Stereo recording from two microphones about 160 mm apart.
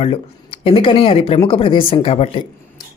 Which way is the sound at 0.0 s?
35° left (ahead or behind).